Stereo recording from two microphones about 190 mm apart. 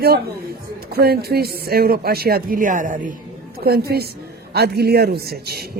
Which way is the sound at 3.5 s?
55° right (ahead or behind).